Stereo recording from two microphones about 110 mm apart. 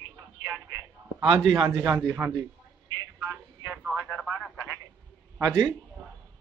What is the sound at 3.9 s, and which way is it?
Radio, 10° right (ahead or behind).